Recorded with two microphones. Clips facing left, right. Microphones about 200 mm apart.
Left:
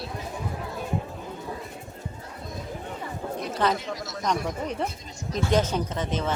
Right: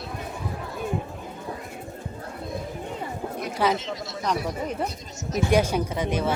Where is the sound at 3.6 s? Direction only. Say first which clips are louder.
Right 2 dB; 10° right (ahead or behind).